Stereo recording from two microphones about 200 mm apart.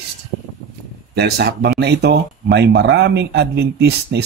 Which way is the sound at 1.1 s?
55° right (ahead or behind).